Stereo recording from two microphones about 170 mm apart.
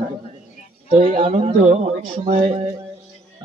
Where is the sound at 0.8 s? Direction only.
50° right (ahead or behind).